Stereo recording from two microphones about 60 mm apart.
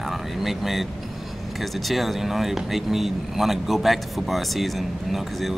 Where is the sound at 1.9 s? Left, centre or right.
Centre.